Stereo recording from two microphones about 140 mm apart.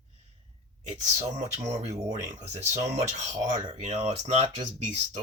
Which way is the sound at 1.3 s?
55° right (ahead or behind).